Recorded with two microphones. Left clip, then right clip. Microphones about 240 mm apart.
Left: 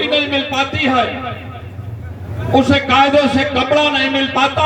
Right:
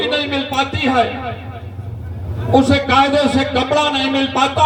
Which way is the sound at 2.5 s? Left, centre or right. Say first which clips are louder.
Left 1 dB; right.